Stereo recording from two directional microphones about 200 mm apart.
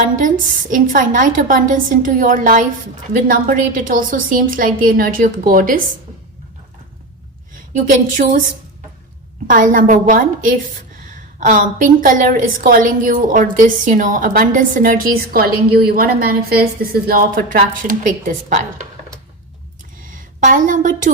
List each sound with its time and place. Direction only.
0.0 s a woman's voice: 40° right (ahead or behind)
8.2 s a woman's voice: 40° right (ahead or behind)
9.5 s a woman's voice: 45° right (ahead or behind)
20.1 s a woman's voice: 40° right (ahead or behind)